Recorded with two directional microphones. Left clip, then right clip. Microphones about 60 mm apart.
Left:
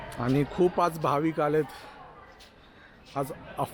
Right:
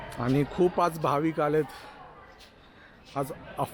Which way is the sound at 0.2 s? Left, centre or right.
Centre.